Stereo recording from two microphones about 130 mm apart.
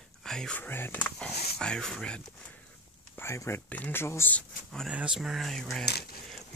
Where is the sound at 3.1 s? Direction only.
20° left (ahead or behind).